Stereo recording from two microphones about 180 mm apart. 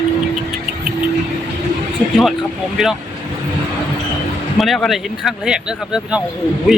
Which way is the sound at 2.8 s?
Centre (ahead or behind).